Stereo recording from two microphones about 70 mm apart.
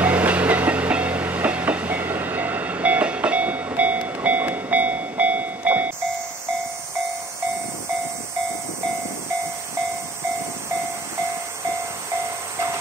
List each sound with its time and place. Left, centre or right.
0.0 s train: right